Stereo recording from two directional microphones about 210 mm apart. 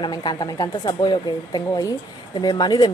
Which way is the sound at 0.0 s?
20° left (ahead or behind).